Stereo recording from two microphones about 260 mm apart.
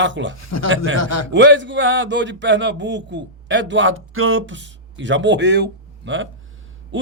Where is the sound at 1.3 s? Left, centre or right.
Right.